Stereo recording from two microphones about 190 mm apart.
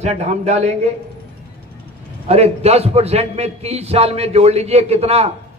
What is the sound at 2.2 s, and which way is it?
A man's voice, 35° right (ahead or behind).